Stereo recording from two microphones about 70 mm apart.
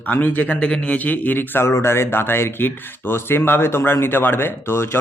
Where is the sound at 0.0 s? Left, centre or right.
Left.